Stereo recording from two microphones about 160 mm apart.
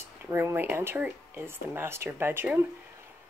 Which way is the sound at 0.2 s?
15° right (ahead or behind).